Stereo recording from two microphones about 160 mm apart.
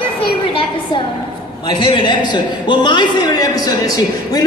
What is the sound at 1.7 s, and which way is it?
A man's voice, 30° left (ahead or behind).